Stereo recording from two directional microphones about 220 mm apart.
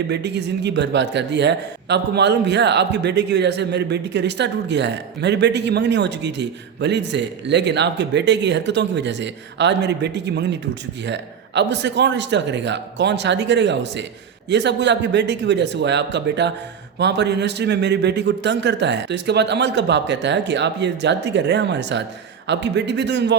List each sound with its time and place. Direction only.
0.1 s speech: 50° right (ahead or behind)